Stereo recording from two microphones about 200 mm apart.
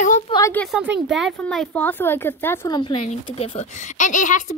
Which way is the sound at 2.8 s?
30° left (ahead or behind).